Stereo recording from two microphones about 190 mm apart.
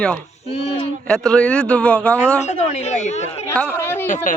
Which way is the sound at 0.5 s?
30° left (ahead or behind).